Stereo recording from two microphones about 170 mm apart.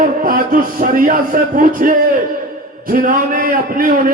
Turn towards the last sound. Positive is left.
turn(degrees=-55)  # may be behind; listen again after turning